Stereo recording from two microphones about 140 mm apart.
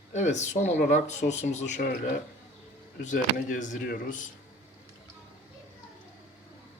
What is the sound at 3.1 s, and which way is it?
Speech, 65° left (ahead or behind).